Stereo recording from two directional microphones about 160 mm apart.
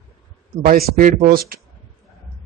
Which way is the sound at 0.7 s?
60° right (ahead or behind).